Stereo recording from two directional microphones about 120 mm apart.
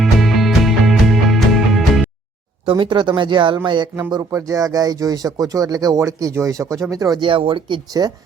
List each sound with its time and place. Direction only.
0.0 s music: centre (ahead or behind)
2.6 s speech: 45° right (ahead or behind)
4.1 s speech: 30° right (ahead or behind)
7.2 s speech: 45° right (ahead or behind)
7.9 s speech: 30° right (ahead or behind)